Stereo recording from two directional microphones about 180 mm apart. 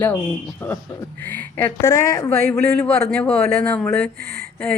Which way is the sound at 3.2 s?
5° left (ahead or behind).